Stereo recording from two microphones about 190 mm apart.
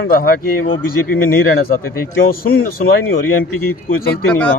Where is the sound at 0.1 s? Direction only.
50° left (ahead or behind).